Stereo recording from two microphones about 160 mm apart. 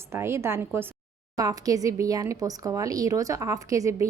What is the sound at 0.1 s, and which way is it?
A woman's voice, 15° right (ahead or behind).